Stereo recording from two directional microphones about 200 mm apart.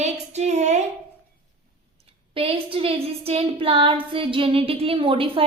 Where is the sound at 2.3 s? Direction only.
25° right (ahead or behind).